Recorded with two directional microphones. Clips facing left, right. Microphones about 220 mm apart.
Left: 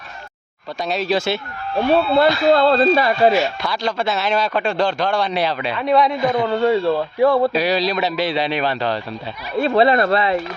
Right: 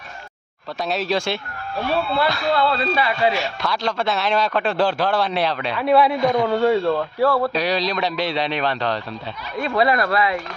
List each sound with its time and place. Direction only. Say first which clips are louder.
0.9 s speech: left 3 dB; centre (ahead or behind)
1.8 s speech: left 6 dB; 50° left (ahead or behind)
3.3 s speech: left 5 dB; centre (ahead or behind)
7.2 s speech: left 5 dB; 20° left (ahead or behind)
7.5 s speech: left 3 dB; 5° left (ahead or behind)
9.6 s speech: left 5 dB; 25° left (ahead or behind)